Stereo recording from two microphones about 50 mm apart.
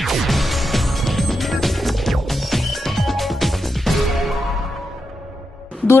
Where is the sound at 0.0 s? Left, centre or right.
Centre.